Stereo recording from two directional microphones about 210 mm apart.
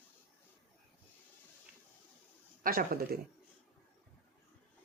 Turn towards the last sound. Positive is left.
turn(degrees=-45)  # may be behind; listen again after turning